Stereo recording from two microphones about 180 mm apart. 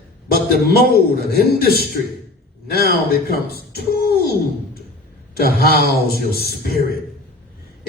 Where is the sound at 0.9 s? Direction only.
60° left (ahead or behind).